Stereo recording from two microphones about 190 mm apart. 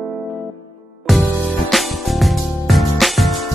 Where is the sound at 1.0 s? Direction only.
Centre (ahead or behind).